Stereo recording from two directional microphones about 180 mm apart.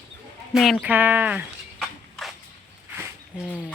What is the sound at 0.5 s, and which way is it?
Speech, centre (ahead or behind).